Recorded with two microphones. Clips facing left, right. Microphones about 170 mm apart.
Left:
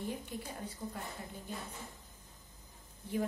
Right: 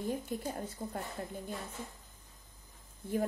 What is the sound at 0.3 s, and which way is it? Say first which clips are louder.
Speech: right 5 dB; 40° right (ahead or behind).